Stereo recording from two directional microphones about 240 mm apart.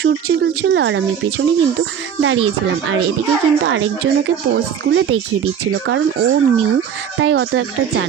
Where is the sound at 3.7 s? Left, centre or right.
Right.